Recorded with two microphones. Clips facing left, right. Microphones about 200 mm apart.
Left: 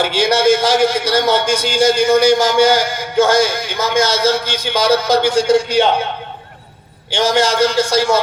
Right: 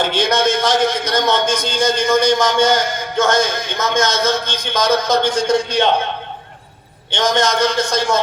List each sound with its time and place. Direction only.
0.0 s a man's voice: 10° left (ahead or behind)
7.1 s a man's voice: 10° left (ahead or behind)